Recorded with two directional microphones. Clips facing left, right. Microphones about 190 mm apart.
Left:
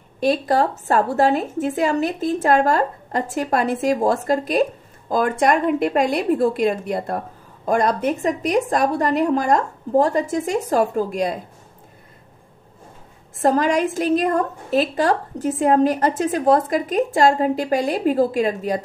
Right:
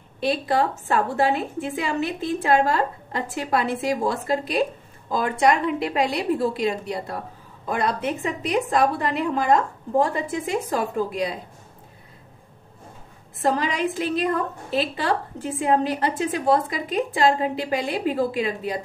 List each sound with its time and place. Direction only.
0.2 s a woman's voice: 45° left (ahead or behind)
13.4 s a woman's voice: 45° left (ahead or behind)